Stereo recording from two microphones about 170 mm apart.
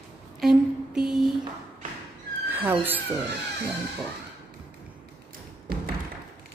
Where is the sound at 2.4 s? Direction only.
10° right (ahead or behind).